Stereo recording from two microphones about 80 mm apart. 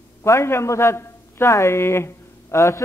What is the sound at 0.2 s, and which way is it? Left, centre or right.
A man's voice, left.